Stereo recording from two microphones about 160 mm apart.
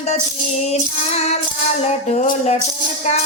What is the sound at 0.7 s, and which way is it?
Music, 45° left (ahead or behind).